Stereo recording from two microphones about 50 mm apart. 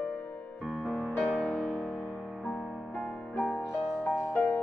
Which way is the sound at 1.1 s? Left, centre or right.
Left.